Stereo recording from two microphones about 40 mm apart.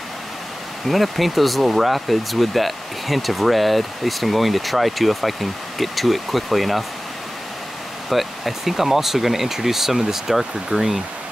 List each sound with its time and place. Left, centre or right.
0.8 s speech: centre
8.1 s speech: centre